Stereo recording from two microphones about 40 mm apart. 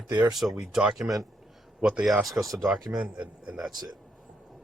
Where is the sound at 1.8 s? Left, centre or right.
Right.